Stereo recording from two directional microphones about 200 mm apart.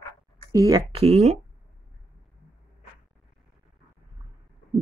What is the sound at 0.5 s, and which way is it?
Speech, 15° right (ahead or behind).